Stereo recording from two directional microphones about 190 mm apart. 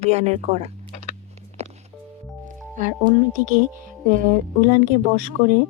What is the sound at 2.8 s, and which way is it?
Speech, 45° right (ahead or behind).